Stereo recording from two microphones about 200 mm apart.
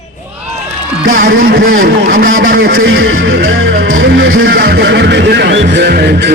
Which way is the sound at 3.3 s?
50° right (ahead or behind).